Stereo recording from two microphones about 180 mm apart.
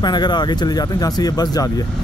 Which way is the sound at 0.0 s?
25° left (ahead or behind).